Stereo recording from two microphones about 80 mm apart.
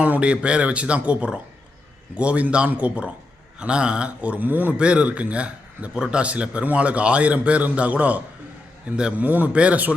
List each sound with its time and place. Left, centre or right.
0.0 s a man's voice: centre